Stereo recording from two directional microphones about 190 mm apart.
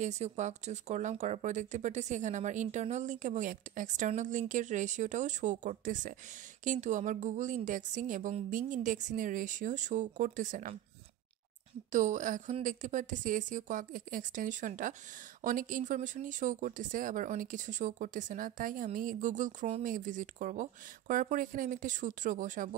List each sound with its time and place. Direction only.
0.0 s speech: 35° right (ahead or behind)
11.9 s speech: 40° right (ahead or behind)